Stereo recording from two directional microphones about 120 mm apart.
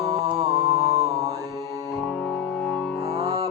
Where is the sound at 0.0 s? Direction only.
55° right (ahead or behind).